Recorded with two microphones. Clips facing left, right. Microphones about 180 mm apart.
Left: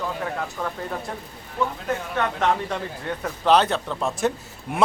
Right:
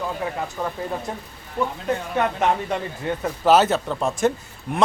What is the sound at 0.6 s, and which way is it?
Speech, 15° right (ahead or behind).